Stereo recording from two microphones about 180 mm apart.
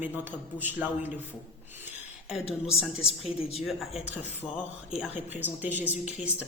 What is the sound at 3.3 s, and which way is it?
Speech, 35° left (ahead or behind).